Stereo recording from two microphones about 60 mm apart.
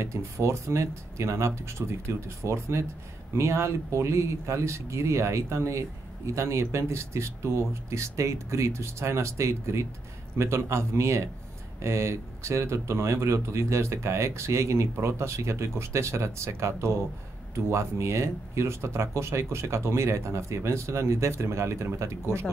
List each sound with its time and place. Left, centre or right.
0.0 s speech: right